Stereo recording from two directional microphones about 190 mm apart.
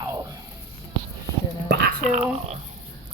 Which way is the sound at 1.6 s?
60° right (ahead or behind).